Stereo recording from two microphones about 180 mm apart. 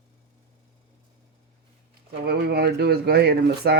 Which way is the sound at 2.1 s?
60° right (ahead or behind).